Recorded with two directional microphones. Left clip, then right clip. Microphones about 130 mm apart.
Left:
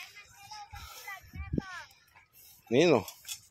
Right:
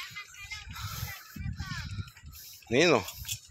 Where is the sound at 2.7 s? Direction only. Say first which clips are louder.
Right 1 dB; 35° left (ahead or behind).